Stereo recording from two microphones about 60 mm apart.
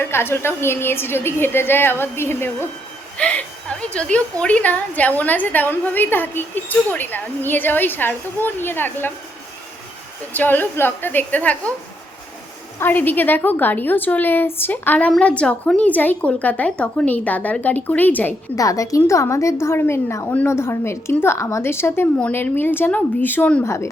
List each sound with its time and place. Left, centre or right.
0.0 s a woman's voice: left
3.2 s a woman's voice: left
10.3 s a woman's voice: left
12.8 s a woman's voice: left
15.2 s speech: centre
15.9 s speech: left
18.5 s a woman's voice: left
23.6 s a woman's voice: left